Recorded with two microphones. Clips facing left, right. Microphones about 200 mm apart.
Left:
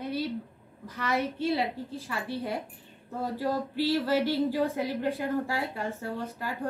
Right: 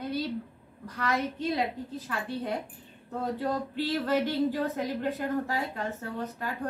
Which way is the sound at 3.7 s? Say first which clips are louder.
Left 3 dB; 10° left (ahead or behind).